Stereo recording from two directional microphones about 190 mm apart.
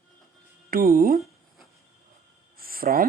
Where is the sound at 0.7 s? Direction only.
50° right (ahead or behind).